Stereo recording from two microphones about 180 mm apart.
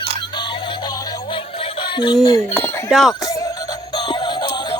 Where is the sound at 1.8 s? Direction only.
25° left (ahead or behind).